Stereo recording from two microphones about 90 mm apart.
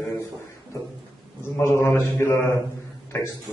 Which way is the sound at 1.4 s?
30° left (ahead or behind).